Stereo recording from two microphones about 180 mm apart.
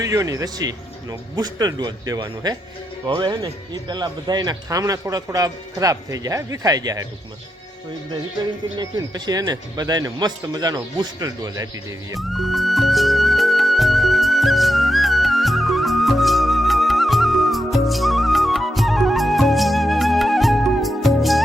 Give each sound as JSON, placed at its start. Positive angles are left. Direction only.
{"t": 0.0, "sound": "speech", "side_deg": -20}
{"t": 8.8, "sound": "speech", "side_deg": -20}
{"t": 12.3, "sound": "music", "side_deg": 0}